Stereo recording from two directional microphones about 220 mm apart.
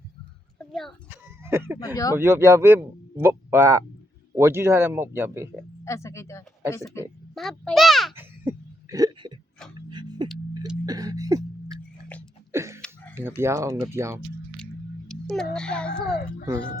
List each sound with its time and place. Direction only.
0.7 s a child's voice: centre (ahead or behind)
1.1 s a sound: 10° right (ahead or behind)
2.1 s speech: 10° right (ahead or behind)
5.8 s speech: 15° left (ahead or behind)
7.3 s a child's voice: centre (ahead or behind)
8.1 s laughter: 10° right (ahead or behind)
9.9 s singing bowl: 20° right (ahead or behind)
10.8 s music: 15° right (ahead or behind)
12.5 s a sound: 10° right (ahead or behind)
13.4 s speech: 15° right (ahead or behind)
14.6 s a sound: centre (ahead or behind)
15.5 s a child's voice: 5° left (ahead or behind)